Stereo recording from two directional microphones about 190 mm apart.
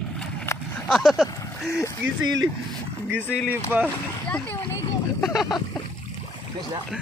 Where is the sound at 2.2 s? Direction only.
85° right.